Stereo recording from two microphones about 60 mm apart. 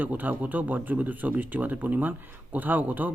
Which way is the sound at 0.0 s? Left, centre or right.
Right.